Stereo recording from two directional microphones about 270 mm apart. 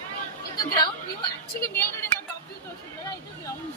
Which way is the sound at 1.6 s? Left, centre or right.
Centre.